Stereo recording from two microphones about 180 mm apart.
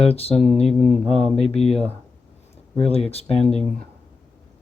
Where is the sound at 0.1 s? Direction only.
35° left (ahead or behind).